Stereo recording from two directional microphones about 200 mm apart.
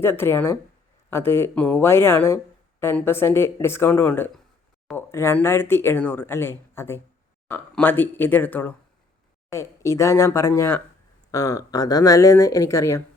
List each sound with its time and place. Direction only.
0.0 s speech: 10° left (ahead or behind)